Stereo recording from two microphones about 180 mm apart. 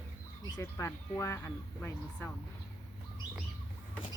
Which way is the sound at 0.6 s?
15° left (ahead or behind).